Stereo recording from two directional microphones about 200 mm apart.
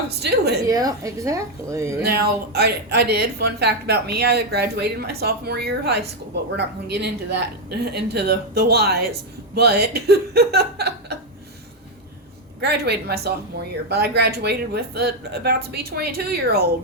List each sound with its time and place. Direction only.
0.1 s a woman's voice: 55° right (ahead or behind)
0.7 s a woman's voice: 20° right (ahead or behind)
2.0 s a woman's voice: 50° right (ahead or behind)
12.6 s a woman's voice: 55° right (ahead or behind)